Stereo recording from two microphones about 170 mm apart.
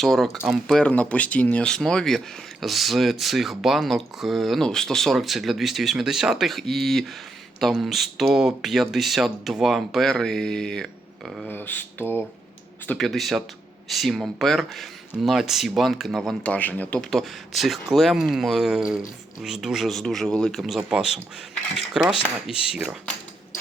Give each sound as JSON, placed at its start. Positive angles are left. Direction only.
{"t": 0.0, "sound": "speech", "side_deg": 0}
{"t": 12.9, "sound": "speech", "side_deg": 0}